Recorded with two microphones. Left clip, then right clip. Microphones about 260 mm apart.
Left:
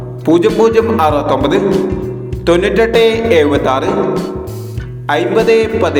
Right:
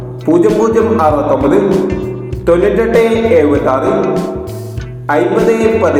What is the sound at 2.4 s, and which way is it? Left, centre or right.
Music, left.